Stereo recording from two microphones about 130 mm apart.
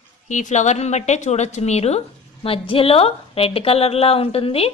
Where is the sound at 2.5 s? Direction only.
45° left (ahead or behind).